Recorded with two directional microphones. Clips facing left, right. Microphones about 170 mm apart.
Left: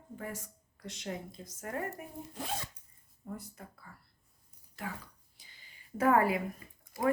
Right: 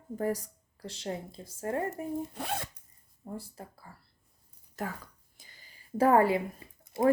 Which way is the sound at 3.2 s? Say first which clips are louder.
Right 3 dB; 30° right (ahead or behind).